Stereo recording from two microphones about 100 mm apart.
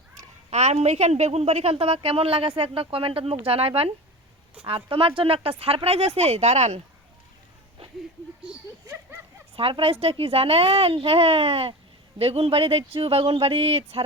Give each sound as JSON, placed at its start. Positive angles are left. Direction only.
{"t": 0.5, "sound": "a woman's voice", "side_deg": -90}
{"t": 4.6, "sound": "a woman's voice", "side_deg": -65}
{"t": 8.9, "sound": "a sound", "side_deg": -20}
{"t": 9.6, "sound": "a woman's voice", "side_deg": -70}